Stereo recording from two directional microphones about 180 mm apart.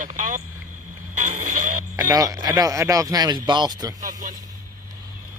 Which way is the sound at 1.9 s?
20° right (ahead or behind).